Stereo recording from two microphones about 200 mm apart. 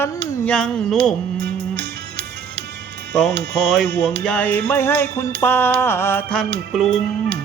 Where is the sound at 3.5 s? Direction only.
Centre (ahead or behind).